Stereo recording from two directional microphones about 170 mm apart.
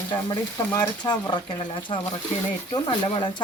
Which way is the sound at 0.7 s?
25° left (ahead or behind).